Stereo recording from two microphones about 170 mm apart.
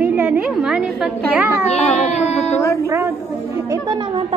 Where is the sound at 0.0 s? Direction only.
10° right (ahead or behind).